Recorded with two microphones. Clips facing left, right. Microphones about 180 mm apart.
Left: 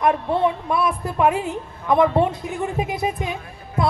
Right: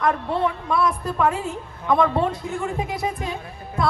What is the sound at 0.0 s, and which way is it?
A woman's voice, 20° left (ahead or behind).